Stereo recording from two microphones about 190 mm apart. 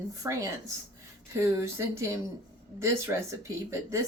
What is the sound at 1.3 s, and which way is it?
Speech, 15° right (ahead or behind).